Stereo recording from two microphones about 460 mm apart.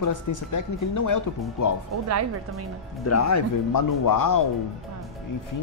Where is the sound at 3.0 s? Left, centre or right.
Left.